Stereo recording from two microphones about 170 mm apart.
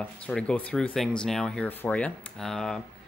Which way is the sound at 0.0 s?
5° left (ahead or behind).